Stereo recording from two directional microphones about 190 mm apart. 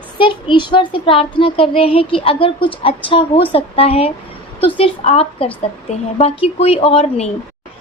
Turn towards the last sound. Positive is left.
turn(degrees=35)  # may be behind; listen again after turning